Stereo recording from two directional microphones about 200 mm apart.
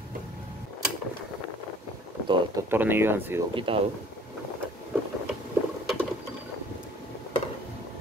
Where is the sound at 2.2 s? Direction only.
15° right (ahead or behind).